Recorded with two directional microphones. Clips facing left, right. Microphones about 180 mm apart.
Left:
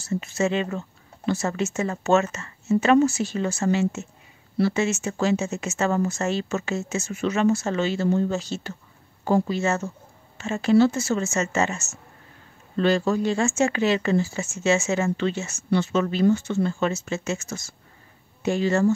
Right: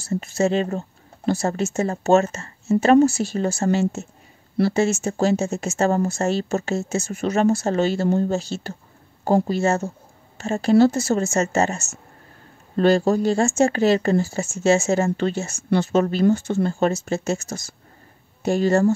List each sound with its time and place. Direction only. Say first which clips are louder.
0.0 s a woman's voice: right 3 dB; 35° right (ahead or behind)